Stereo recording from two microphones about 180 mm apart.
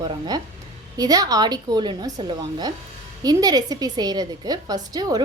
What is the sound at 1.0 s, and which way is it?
A woman's voice, 20° right (ahead or behind).